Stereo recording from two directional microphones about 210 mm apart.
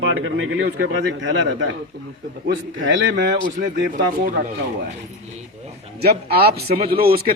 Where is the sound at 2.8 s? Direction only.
65° right (ahead or behind).